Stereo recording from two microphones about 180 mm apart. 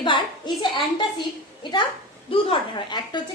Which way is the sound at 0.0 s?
25° left (ahead or behind).